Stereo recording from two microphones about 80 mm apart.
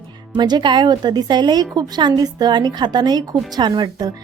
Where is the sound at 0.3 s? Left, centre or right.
Right.